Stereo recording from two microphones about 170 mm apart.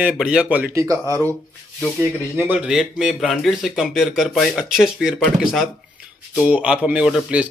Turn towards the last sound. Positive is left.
turn(degrees=-5)  # may be behind; listen again after turning